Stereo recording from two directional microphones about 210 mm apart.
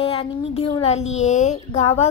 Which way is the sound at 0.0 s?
25° left (ahead or behind).